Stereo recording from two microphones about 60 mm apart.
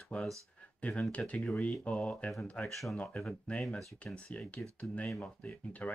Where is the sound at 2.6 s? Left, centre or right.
Centre.